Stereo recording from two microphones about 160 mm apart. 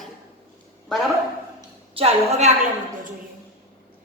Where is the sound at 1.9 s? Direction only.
40° right (ahead or behind).